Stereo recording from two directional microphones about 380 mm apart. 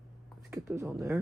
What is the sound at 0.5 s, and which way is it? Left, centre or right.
Speech, centre.